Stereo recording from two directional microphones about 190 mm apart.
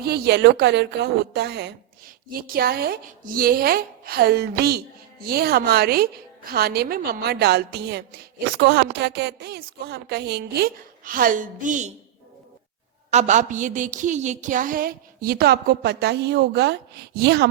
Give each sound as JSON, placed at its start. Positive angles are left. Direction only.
{"t": 0.0, "sound": "a woman's voice", "side_deg": -55}
{"t": 2.3, "sound": "a woman's voice", "side_deg": -50}
{"t": 13.1, "sound": "a woman's voice", "side_deg": -35}